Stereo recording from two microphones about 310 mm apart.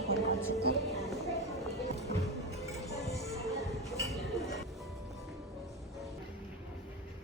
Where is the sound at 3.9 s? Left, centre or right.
Centre.